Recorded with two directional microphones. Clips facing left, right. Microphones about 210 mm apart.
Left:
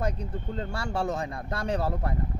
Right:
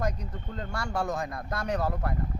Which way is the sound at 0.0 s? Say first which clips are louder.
Left 1 dB; 30° left (ahead or behind).